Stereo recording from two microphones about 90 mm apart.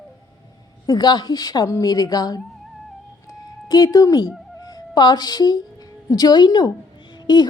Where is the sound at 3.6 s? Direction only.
40° left (ahead or behind).